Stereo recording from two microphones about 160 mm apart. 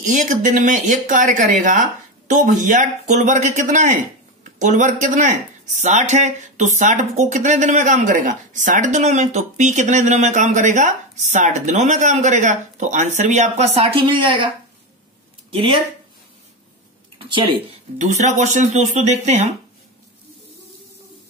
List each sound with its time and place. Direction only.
0.0 s speech: 55° right (ahead or behind); by 14.5 s 30° right (ahead or behind)
15.5 s speech: 30° right (ahead or behind)
17.3 s speech: 30° right (ahead or behind)
17.9 s speech: 45° right (ahead or behind)